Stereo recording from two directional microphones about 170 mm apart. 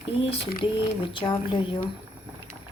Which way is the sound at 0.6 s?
30° left (ahead or behind).